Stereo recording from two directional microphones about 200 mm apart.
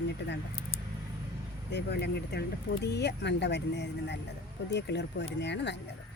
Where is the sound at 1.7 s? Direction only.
55° left (ahead or behind).